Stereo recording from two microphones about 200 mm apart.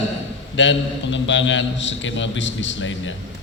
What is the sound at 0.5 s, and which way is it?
A man's voice, 65° left (ahead or behind).